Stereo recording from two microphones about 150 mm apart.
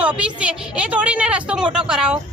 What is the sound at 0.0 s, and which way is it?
A woman's voice, 10° right (ahead or behind).